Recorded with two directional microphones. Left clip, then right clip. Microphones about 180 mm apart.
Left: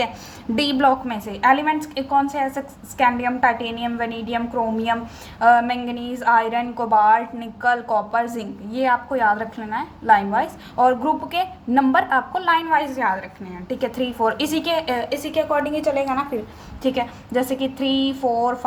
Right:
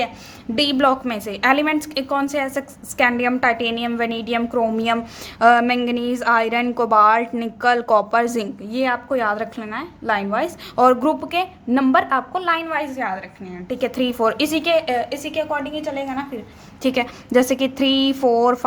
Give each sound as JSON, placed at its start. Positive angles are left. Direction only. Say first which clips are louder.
{"t": 0.5, "sound": "a woman's voice", "louder": "right 2 dB", "side_deg": -20}
{"t": 0.9, "sound": "a woman's voice", "louder": "even", "side_deg": -40}
{"t": 5.4, "sound": "a woman's voice", "louder": "right 1 dB", "side_deg": -50}
{"t": 11.3, "sound": "a woman's voice", "louder": "right 2 dB", "side_deg": -30}
{"t": 15.7, "sound": "a woman's voice", "louder": "left 5 dB", "side_deg": 0}
{"t": 16.8, "sound": "a woman's voice", "louder": "right 2 dB", "side_deg": -40}